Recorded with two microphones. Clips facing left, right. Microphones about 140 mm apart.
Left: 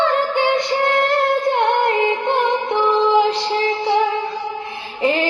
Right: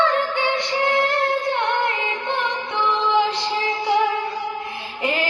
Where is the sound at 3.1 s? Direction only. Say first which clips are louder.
Left 4 dB; 35° left (ahead or behind).